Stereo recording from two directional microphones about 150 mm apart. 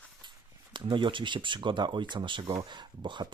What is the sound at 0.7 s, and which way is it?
Speech, 30° right (ahead or behind).